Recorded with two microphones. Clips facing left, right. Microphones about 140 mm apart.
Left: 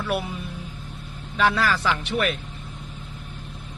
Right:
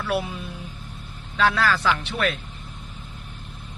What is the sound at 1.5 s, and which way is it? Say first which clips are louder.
Speech: right 1 dB; 25° left (ahead or behind).